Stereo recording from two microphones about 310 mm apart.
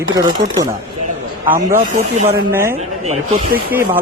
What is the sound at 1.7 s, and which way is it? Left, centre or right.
Speech, right.